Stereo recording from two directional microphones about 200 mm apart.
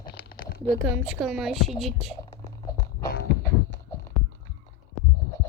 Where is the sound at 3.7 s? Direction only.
15° left (ahead or behind).